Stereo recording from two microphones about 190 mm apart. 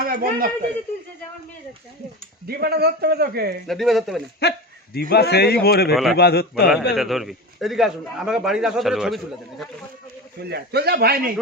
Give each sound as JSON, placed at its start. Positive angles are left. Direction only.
{"t": 0.0, "sound": "speech", "side_deg": -50}
{"t": 2.5, "sound": "a man's voice", "side_deg": -55}
{"t": 3.7, "sound": "a man's voice", "side_deg": 0}
{"t": 4.4, "sound": "a man's voice", "side_deg": 60}
{"t": 6.9, "sound": "a man's voice", "side_deg": 0}
{"t": 10.5, "sound": "a man's voice", "side_deg": -60}